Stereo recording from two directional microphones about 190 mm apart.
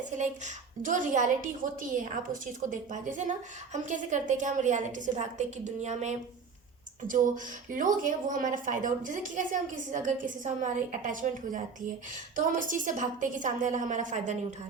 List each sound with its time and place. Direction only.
0.2 s a woman's voice: 40° right (ahead or behind)